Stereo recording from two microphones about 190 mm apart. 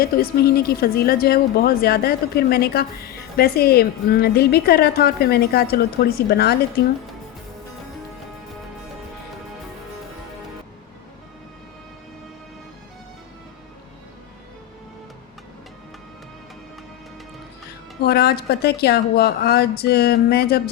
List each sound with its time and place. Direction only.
0.0 s a woman's voice: 55° left (ahead or behind)
18.0 s a woman's voice: 55° left (ahead or behind)